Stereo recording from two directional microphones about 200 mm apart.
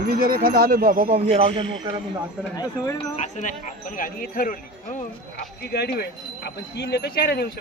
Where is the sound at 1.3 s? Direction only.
25° right (ahead or behind).